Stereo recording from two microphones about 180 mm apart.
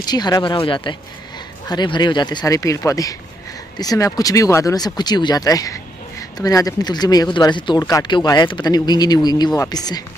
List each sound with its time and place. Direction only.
0.0 s speech: 20° left (ahead or behind)